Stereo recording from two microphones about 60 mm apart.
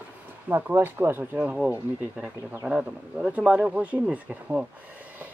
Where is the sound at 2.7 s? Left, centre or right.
Centre.